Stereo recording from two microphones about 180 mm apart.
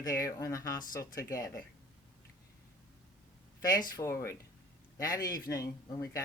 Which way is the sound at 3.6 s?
20° left (ahead or behind).